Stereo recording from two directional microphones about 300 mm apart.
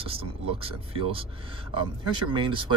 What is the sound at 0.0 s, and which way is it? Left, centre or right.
Speech, centre.